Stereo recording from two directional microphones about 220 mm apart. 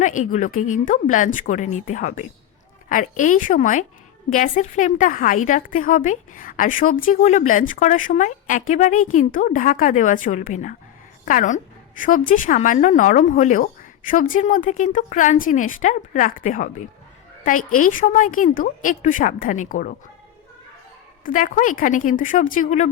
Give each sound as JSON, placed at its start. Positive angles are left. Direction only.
{"t": 0.2, "sound": "a woman's voice", "side_deg": 35}
{"t": 21.2, "sound": "a woman's voice", "side_deg": 35}